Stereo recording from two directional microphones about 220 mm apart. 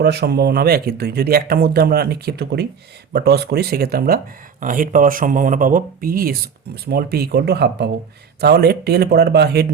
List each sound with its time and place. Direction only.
0.0 s speech: 50° right (ahead or behind)